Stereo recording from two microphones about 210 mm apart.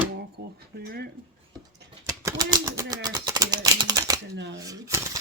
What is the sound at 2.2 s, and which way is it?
Typewriter, 15° right (ahead or behind).